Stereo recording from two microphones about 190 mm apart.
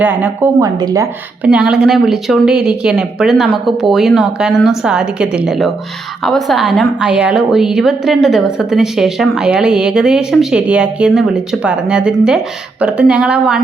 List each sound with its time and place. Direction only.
0.0 s speech: 10° right (ahead or behind)
0.8 s a woman's voice: 20° right (ahead or behind)
1.5 s a woman's voice: 5° right (ahead or behind)